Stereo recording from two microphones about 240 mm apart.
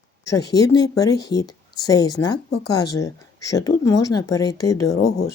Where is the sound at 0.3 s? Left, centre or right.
Centre.